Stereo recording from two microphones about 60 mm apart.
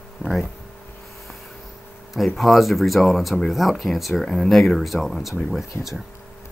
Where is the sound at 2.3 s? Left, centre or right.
Centre.